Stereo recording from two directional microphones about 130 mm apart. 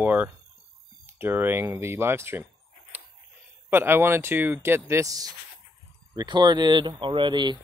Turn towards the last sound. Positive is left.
turn(degrees=-35)  # may be behind; listen again after turning